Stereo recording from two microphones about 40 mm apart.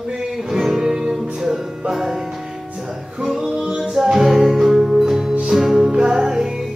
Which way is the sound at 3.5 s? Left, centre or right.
Centre.